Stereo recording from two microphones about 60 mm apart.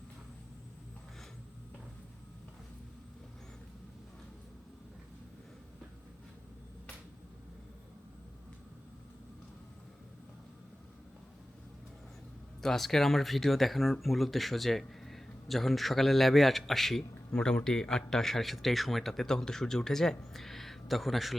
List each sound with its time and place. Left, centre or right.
12.6 s speech: centre